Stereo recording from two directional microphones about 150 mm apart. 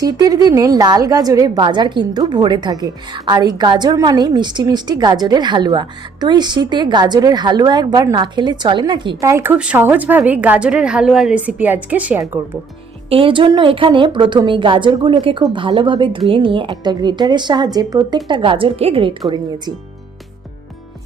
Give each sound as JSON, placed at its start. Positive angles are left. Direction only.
{"t": 0.0, "sound": "a woman's voice", "side_deg": -25}
{"t": 9.3, "sound": "a woman's voice", "side_deg": -15}
{"t": 13.1, "sound": "a woman's voice", "side_deg": -35}